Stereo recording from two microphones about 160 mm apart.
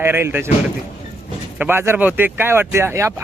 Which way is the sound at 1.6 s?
15° right (ahead or behind).